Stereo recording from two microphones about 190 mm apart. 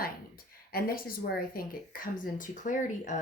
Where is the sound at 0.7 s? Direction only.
50° left (ahead or behind).